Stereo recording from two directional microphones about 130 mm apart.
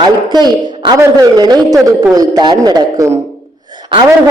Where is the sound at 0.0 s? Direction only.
35° right (ahead or behind).